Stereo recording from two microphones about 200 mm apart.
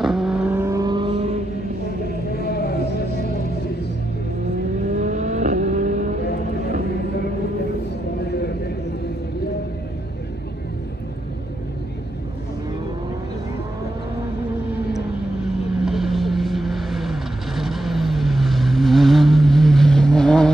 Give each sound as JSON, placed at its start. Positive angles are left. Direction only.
{"t": 0.0, "sound": "vehicle", "side_deg": 0}
{"t": 2.3, "sound": "vehicle", "side_deg": 55}
{"t": 4.9, "sound": "vehicle", "side_deg": -35}
{"t": 15.8, "sound": "vehicle", "side_deg": 0}